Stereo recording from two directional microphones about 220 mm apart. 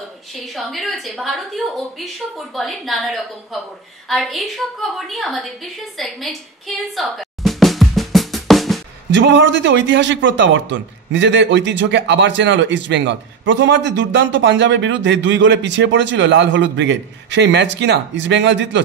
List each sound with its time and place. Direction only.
0.6 s a woman's voice: centre (ahead or behind)
7.0 s drum: centre (ahead or behind)
9.1 s a man's voice: 55° right (ahead or behind)